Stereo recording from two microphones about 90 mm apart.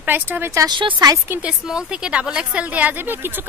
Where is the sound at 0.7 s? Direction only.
60° right (ahead or behind).